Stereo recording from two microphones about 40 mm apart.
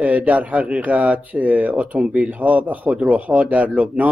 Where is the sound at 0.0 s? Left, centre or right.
Right.